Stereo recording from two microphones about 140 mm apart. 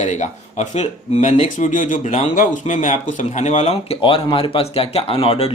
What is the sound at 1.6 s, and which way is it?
Speech, 65° left (ahead or behind).